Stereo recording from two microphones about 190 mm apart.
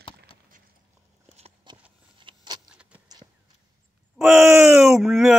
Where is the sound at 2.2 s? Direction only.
25° right (ahead or behind).